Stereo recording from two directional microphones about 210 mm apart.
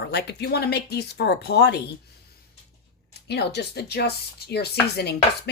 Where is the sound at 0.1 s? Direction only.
50° left (ahead or behind).